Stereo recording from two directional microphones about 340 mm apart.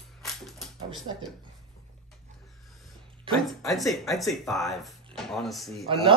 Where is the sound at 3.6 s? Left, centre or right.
Centre.